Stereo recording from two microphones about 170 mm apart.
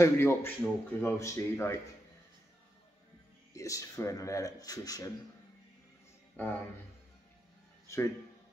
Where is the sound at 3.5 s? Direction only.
20° left (ahead or behind).